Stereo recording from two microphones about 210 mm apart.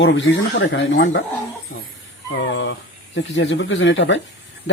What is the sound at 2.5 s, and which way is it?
Speech, 60° left (ahead or behind).